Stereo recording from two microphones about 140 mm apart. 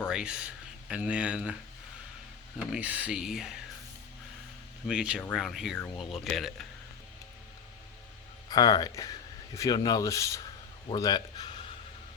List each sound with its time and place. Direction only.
0.1 s speech: 5° right (ahead or behind)
2.6 s speech: 10° right (ahead or behind)
4.9 s speech: 5° right (ahead or behind)
8.4 s rub: 30° left (ahead or behind)